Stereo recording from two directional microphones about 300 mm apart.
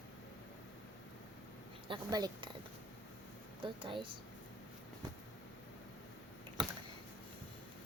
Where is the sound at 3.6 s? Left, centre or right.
Centre.